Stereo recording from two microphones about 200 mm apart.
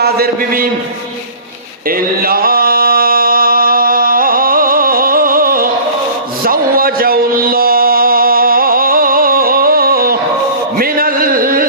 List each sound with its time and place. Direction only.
0.0 s a man's voice: 50° right (ahead or behind)
2.2 s music: 45° right (ahead or behind)
6.4 s a sound: 45° right (ahead or behind)